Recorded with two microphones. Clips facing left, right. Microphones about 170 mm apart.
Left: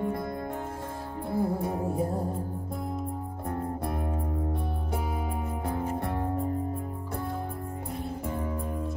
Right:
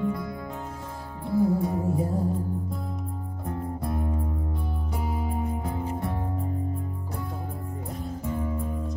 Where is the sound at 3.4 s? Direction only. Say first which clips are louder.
Right 1 dB; 55° left (ahead or behind).